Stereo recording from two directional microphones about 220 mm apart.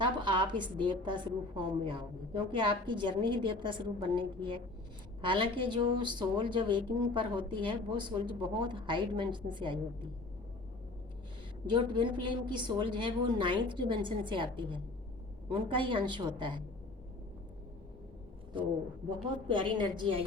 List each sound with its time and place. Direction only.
0.0 s a woman's voice: 20° right (ahead or behind)
11.6 s a woman's voice: 20° right (ahead or behind)
19.5 s a woman's voice: 20° right (ahead or behind)